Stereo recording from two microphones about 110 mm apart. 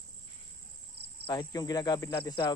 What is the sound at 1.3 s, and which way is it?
Speech, 35° left (ahead or behind).